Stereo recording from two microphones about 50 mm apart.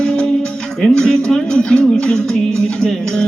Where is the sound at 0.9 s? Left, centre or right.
Centre.